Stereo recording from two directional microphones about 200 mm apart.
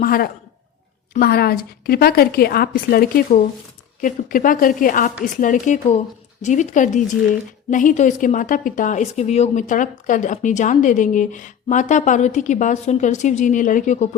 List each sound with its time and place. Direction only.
0.0 s a woman's voice: 45° left (ahead or behind)